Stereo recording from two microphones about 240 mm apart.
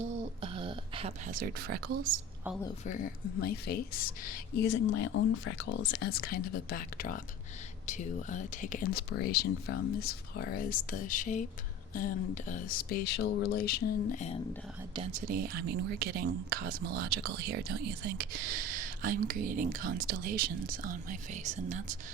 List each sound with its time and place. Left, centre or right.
0.0 s a sound: right
3.4 s speech: left
14.9 s speech: right
15.3 s speech: right